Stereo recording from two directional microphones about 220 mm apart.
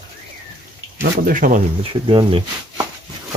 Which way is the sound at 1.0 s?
40° right (ahead or behind).